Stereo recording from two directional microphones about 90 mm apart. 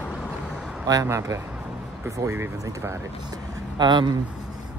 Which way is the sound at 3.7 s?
55° right (ahead or behind).